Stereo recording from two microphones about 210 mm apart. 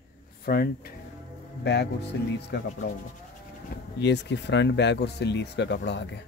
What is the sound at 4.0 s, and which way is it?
Speech, 55° left (ahead or behind).